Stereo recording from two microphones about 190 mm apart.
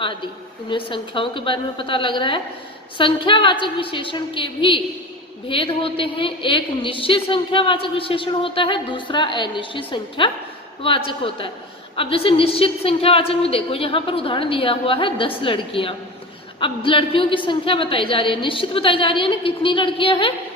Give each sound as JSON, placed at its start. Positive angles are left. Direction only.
{"t": 0.0, "sound": "a woman's voice", "side_deg": 25}